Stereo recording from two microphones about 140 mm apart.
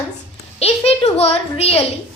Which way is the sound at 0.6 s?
45° left (ahead or behind).